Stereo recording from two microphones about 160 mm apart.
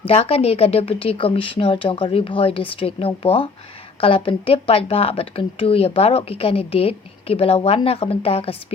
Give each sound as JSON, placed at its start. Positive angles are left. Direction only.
{"t": 0.0, "sound": "a woman's voice", "side_deg": 35}